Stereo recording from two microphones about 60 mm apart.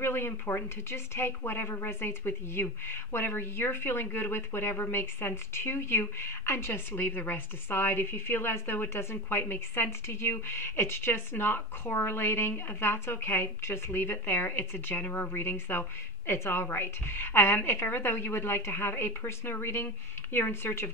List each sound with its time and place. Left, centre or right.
0.0 s speech: left